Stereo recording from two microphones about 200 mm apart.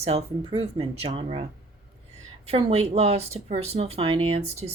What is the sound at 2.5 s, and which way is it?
Speech, 30° right (ahead or behind).